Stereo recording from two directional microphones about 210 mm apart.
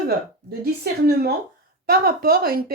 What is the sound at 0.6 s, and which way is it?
A woman's voice, 45° right (ahead or behind).